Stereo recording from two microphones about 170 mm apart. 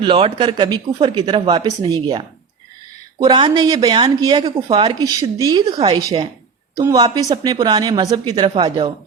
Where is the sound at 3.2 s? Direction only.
25° right (ahead or behind).